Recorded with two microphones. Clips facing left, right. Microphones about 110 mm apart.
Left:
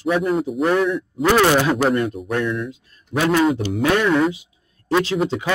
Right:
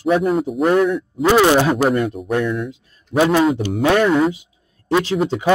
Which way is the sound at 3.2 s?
20° right (ahead or behind).